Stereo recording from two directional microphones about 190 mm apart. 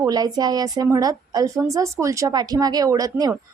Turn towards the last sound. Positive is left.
turn(degrees=-20)  # may be behind; listen again after turning